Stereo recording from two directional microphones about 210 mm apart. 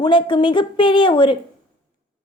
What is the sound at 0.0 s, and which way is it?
A woman's voice, 20° left (ahead or behind).